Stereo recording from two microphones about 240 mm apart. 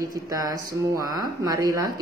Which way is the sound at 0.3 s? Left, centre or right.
Centre.